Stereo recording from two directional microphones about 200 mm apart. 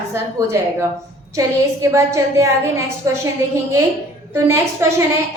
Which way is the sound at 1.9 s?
15° right (ahead or behind).